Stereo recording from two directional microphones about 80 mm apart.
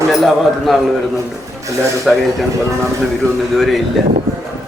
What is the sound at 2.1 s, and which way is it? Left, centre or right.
Speech, centre.